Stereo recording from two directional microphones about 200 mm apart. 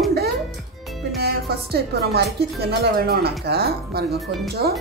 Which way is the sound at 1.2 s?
50° right (ahead or behind).